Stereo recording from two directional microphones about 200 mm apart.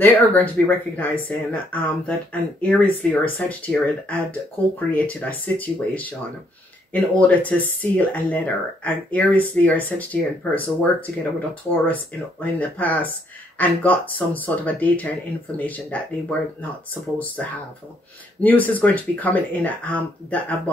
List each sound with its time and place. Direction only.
0.0 s speech: 10° left (ahead or behind)
18.4 s speech: 10° left (ahead or behind)